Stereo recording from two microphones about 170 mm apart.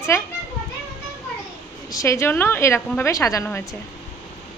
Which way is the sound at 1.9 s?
20° left (ahead or behind).